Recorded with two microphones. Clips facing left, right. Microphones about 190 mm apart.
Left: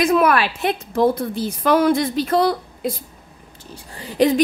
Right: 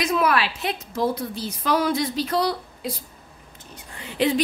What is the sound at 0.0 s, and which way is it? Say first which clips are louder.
A woman's voice: left 5 dB; 55° left (ahead or behind).